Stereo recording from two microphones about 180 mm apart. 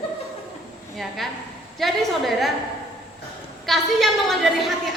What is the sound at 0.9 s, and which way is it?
A woman's voice, centre (ahead or behind).